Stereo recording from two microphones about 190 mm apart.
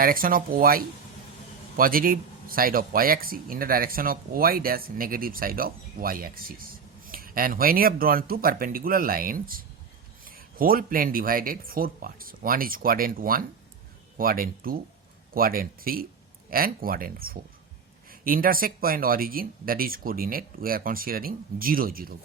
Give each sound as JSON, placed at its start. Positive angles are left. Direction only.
{"t": 0.0, "sound": "speech", "side_deg": -50}